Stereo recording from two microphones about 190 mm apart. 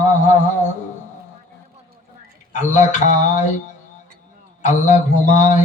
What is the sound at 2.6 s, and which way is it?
Mantra, 40° left (ahead or behind).